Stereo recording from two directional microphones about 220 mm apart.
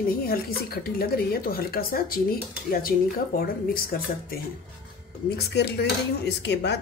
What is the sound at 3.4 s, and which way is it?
A woman's voice, 40° left (ahead or behind).